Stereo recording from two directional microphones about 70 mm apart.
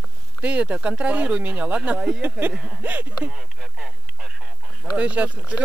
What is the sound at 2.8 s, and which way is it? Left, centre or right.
Speech, right.